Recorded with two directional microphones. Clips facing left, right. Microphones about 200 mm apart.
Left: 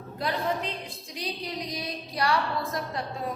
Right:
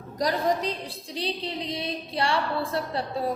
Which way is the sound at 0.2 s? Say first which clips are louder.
Right 4 dB; 40° right (ahead or behind).